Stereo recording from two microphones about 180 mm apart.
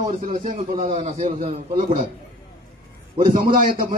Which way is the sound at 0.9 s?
30° right (ahead or behind).